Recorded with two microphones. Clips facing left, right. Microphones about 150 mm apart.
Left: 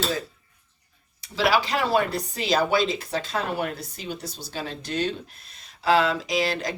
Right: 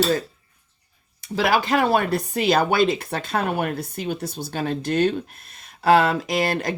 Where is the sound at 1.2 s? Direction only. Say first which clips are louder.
Right 2 dB; 50° right (ahead or behind).